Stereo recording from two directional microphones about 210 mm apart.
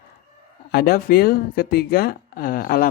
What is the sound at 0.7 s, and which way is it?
Speech, 45° left (ahead or behind).